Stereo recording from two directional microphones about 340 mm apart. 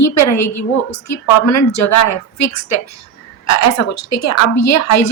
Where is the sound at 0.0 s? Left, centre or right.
Left.